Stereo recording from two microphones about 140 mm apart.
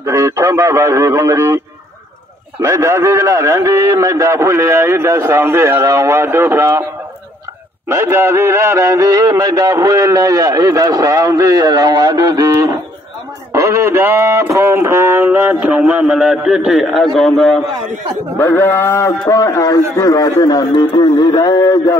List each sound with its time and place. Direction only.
0.0 s music: 20° right (ahead or behind)
2.6 s music: 20° right (ahead or behind)
7.9 s music: 20° right (ahead or behind)
13.5 s speech: 20° right (ahead or behind); by 17.6 s centre (ahead or behind)
18.4 s a man's voice: 15° left (ahead or behind)